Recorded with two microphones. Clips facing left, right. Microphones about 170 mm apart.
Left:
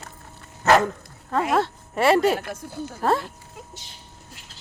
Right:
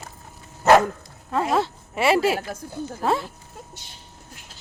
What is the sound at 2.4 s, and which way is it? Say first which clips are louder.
Speech: right 1 dB; 60° left (ahead or behind).